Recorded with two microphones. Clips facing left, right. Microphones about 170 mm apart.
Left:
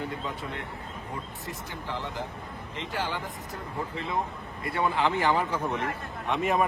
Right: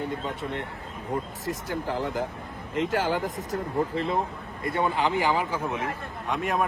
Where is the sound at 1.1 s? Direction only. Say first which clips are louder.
Right 10 dB; 45° right (ahead or behind).